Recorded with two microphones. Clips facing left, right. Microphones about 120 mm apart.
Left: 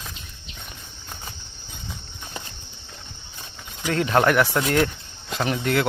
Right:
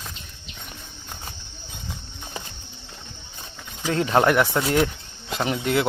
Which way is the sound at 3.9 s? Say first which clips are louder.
Even; 15° right (ahead or behind).